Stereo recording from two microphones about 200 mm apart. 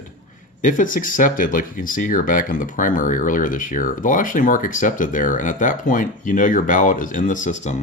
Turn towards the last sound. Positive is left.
turn(degrees=40)  # may be behind; listen again after turning